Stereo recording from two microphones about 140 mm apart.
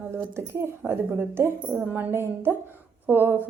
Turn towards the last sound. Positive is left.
turn(degrees=-15)  # may be behind; listen again after turning